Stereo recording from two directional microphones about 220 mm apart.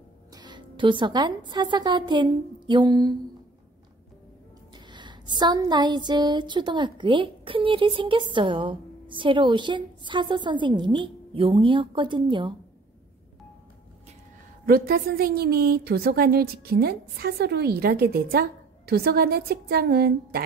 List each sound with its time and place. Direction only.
0.3 s a woman's voice: 20° right (ahead or behind)
4.7 s a sound: 20° right (ahead or behind)
14.7 s a woman's voice: 40° right (ahead or behind)